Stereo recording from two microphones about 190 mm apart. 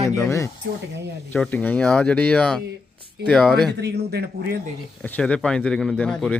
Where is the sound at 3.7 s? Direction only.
60° right (ahead or behind).